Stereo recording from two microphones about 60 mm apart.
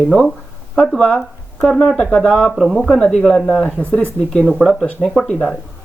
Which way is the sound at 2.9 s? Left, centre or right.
Centre.